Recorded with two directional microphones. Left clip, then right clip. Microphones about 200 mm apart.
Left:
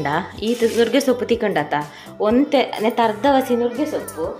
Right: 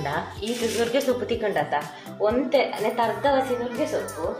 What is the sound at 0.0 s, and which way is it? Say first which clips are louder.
Speech: left 6 dB; 45° left (ahead or behind).